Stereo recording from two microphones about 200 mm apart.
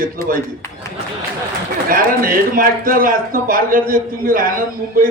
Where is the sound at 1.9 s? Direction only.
45° right (ahead or behind).